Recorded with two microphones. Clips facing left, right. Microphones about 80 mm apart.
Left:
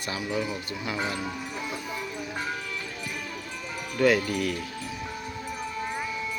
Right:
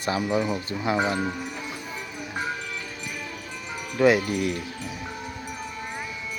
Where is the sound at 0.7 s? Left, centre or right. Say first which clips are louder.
Right 6 dB; right.